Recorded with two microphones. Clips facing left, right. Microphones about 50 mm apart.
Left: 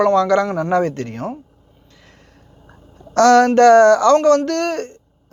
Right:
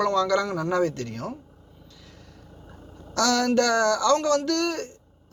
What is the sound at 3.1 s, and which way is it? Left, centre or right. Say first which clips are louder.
A man's voice: left 11 dB; left.